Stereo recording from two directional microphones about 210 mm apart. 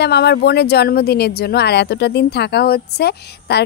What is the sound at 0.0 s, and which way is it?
Speech, 50° left (ahead or behind).